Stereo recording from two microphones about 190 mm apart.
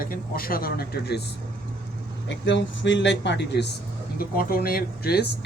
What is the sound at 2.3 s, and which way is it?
Speech, 70° left (ahead or behind).